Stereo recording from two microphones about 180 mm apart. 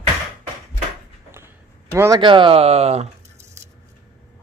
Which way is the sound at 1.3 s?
15° right (ahead or behind).